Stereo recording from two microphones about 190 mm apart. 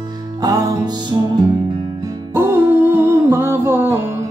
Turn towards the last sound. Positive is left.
turn(degrees=-10)  # may be behind; listen again after turning